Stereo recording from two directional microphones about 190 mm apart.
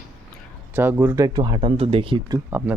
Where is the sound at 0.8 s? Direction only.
10° right (ahead or behind); by 2.4 s 30° right (ahead or behind).